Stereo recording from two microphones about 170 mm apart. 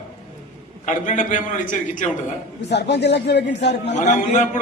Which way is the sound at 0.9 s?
45° left (ahead or behind).